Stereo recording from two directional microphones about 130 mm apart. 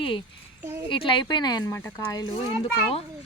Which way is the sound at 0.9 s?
40° left (ahead or behind).